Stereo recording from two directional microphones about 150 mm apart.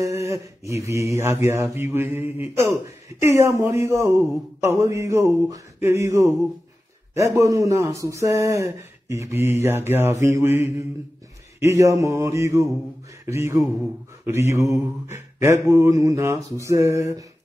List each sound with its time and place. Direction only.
0.2 s speech: 20° right (ahead or behind)
13.2 s a sound: 20° right (ahead or behind)
14.2 s speech: 20° right (ahead or behind)